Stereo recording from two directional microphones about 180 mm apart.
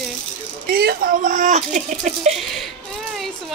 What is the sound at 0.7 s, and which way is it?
Speech, 55° right (ahead or behind).